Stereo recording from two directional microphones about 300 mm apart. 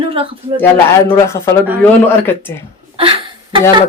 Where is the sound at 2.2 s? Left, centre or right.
Centre.